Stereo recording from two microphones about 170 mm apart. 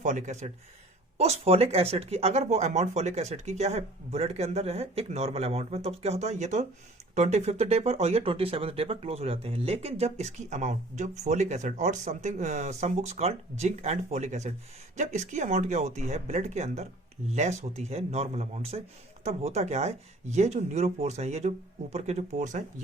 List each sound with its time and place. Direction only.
0.0 s speech: 45° right (ahead or behind)